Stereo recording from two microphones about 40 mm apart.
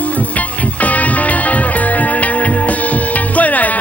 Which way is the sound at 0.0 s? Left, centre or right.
Left.